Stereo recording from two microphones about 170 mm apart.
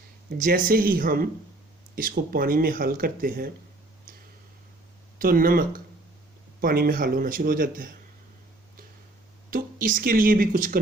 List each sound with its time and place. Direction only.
0.3 s speech: 55° right (ahead or behind)
5.2 s speech: 55° right (ahead or behind)
9.5 s speech: 55° right (ahead or behind)